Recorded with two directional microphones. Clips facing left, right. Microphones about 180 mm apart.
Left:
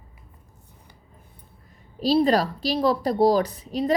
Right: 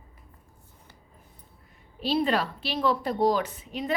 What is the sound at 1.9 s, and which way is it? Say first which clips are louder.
Speech: left 6 dB; 35° left (ahead or behind).